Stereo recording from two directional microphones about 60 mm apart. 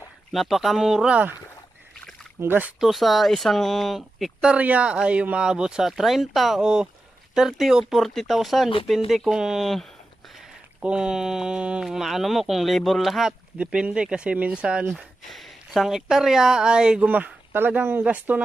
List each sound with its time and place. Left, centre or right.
0.3 s speech: centre
2.4 s speech: right
2.8 s speech: centre
4.5 s speech: right; by 6.6 s centre
6.6 s speech: centre
10.8 s speech: centre
13.6 s speech: centre
15.3 s speech: centre
17.1 s speech: right